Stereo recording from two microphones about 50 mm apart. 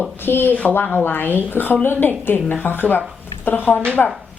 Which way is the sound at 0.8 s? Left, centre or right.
Left.